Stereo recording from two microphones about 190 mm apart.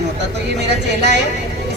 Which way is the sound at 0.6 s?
65° right (ahead or behind).